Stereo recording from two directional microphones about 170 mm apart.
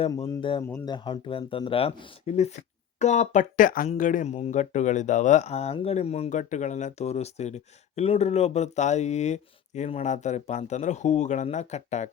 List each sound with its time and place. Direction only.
0.6 s speech: 20° left (ahead or behind); by 12.1 s 40° left (ahead or behind)